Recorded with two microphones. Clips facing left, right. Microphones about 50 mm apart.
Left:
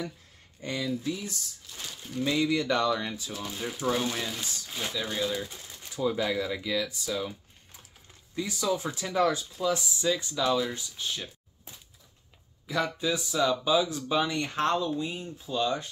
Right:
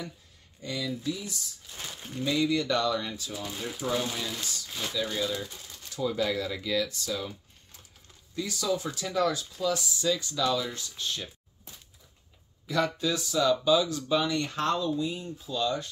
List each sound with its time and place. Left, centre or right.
0.6 s speech: left
1.7 s speech: right
2.2 s speech: left
3.3 s speech: centre
3.6 s speech: centre
4.1 s speech: centre
4.6 s speech: centre
8.4 s speech: left